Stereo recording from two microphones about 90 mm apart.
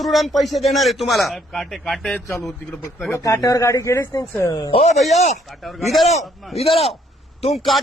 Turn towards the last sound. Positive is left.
turn(degrees=0)  # may be behind; listen again after turning